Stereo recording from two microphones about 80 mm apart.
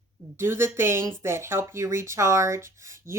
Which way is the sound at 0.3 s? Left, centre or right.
Right.